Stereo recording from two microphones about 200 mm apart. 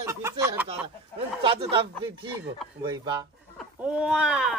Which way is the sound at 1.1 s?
25° right (ahead or behind).